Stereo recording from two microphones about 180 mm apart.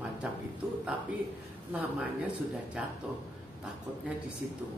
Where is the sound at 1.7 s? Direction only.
10° right (ahead or behind).